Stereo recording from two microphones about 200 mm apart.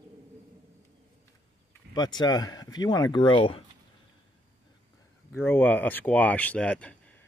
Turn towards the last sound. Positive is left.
turn(degrees=5)  # may be behind; listen again after turning